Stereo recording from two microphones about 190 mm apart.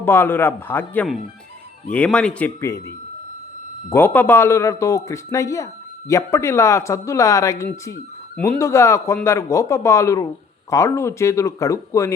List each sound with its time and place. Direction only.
0.0 s a man's voice: 10° left (ahead or behind)